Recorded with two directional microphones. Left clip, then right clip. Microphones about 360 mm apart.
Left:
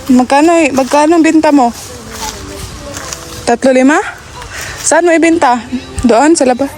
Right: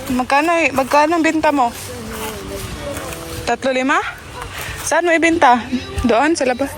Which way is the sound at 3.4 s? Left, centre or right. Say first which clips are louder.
Left 9 dB; centre.